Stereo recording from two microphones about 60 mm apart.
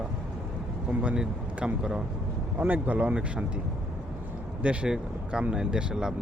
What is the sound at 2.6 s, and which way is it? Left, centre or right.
Speech, right.